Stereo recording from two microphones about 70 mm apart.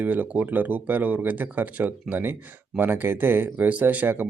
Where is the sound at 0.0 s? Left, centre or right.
Right.